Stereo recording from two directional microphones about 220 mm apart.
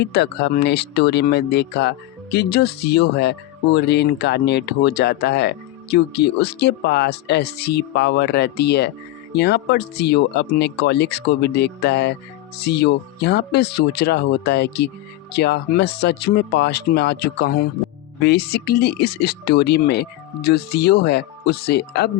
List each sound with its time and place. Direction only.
0.0 s speech: 50° left (ahead or behind)